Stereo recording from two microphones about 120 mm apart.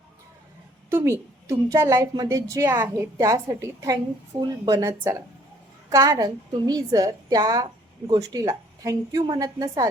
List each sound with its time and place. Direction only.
0.9 s a woman's voice: 20° right (ahead or behind)
4.8 s a woman's voice: 20° right (ahead or behind)